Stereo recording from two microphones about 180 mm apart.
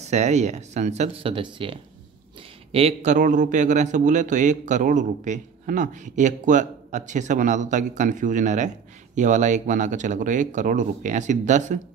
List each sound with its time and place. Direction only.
0.0 s a man's voice: 40° right (ahead or behind)